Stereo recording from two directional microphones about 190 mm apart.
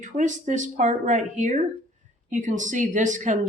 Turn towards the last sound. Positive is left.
turn(degrees=-40)  # may be behind; listen again after turning